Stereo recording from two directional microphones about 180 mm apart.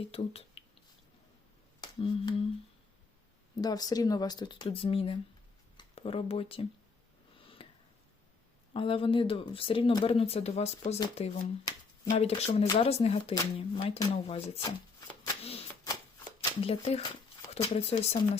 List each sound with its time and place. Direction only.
0.1 s speech: 35° left (ahead or behind)
1.8 s a sound: 30° left (ahead or behind)
3.6 s speech: 20° left (ahead or behind)
7.4 s a sound: 30° left (ahead or behind)
8.7 s speech: 30° left (ahead or behind)
15.4 s typewriter: 35° left (ahead or behind)
16.4 s speech: 30° left (ahead or behind)